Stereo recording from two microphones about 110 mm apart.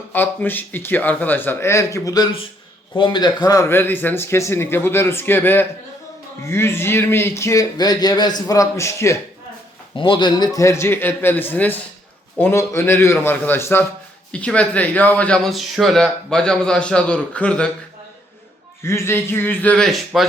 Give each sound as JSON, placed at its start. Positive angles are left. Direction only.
{"t": 0.1, "sound": "speech", "side_deg": 15}
{"t": 2.9, "sound": "a man's voice", "side_deg": 45}
{"t": 3.7, "sound": "speech", "side_deg": 20}
{"t": 9.9, "sound": "speech", "side_deg": 45}
{"t": 14.3, "sound": "a man's voice", "side_deg": 10}
{"t": 15.4, "sound": "a man's voice", "side_deg": 0}
{"t": 18.8, "sound": "speech", "side_deg": 25}
{"t": 19.7, "sound": "speech", "side_deg": 0}